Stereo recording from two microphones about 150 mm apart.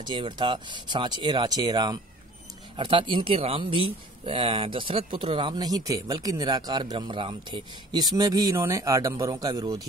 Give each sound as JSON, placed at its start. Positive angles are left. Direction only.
{"t": 0.0, "sound": "speech", "side_deg": -30}